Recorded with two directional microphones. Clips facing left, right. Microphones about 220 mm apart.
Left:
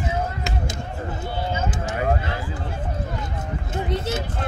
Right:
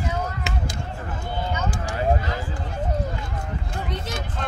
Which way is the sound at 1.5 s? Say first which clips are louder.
Left 2 dB; 25° left (ahead or behind).